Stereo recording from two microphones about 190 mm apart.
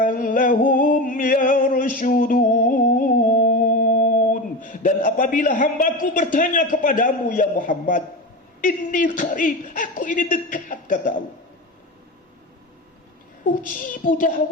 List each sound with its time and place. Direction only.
0.0 s a sound: 45° left (ahead or behind)
8.6 s a woman's voice: 45° left (ahead or behind)
13.5 s a woman's voice: 45° left (ahead or behind)